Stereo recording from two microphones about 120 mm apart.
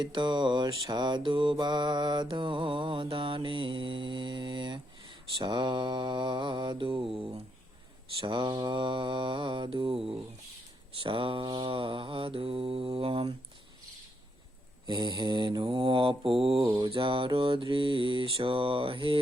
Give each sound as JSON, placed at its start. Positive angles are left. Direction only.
{"t": 0.0, "sound": "mantra", "side_deg": -40}
{"t": 8.2, "sound": "mantra", "side_deg": -40}
{"t": 14.8, "sound": "mantra", "side_deg": -40}